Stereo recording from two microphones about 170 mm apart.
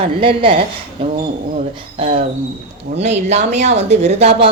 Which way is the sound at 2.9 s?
40° right (ahead or behind).